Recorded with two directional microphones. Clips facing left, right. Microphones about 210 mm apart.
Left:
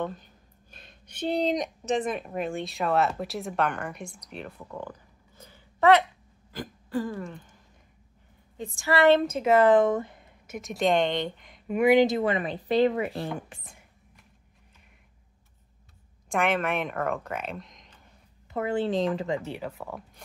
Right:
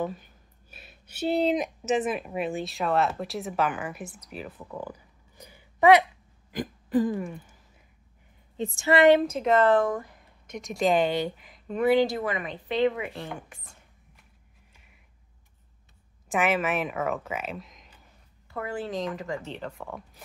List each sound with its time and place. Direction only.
0.0 s speech: 5° right (ahead or behind)
6.5 s throat clearing: 15° right (ahead or behind)
8.5 s a woman's voice: 25° right (ahead or behind)
9.2 s speech: centre (ahead or behind); by 10.2 s 25° left (ahead or behind)
10.4 s speech: 5° left (ahead or behind)
11.6 s speech: 10° left (ahead or behind)
12.2 s speech: 30° left (ahead or behind)
16.3 s speech: 5° right (ahead or behind)
18.5 s speech: 25° left (ahead or behind)
19.4 s speech: 10° left (ahead or behind)